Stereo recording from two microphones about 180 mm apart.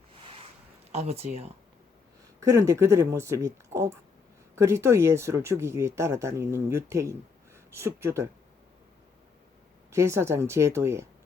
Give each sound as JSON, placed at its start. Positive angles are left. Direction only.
{"t": 0.9, "sound": "speech", "side_deg": -35}
{"t": 2.4, "sound": "speech", "side_deg": -15}
{"t": 9.9, "sound": "speech", "side_deg": -15}